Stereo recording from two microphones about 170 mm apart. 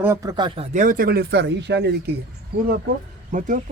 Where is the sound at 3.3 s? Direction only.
50° right (ahead or behind).